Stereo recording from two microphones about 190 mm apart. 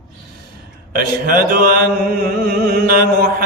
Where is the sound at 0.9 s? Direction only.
50° right (ahead or behind).